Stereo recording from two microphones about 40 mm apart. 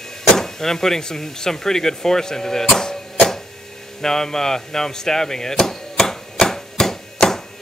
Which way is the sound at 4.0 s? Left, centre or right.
Centre.